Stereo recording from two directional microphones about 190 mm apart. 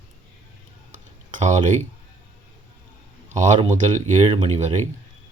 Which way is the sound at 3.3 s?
40° right (ahead or behind).